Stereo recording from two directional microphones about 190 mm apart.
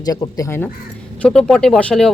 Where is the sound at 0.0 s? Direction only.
20° left (ahead or behind).